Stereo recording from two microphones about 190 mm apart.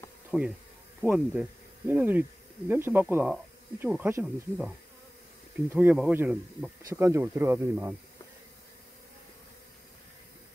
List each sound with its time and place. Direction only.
0.3 s speech: 5° right (ahead or behind)